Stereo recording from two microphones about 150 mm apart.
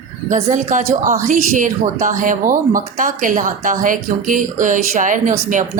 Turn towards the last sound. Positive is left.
turn(degrees=-60)  # may be behind; listen again after turning